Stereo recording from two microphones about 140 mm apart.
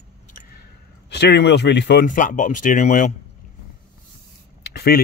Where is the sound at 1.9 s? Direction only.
70° left (ahead or behind).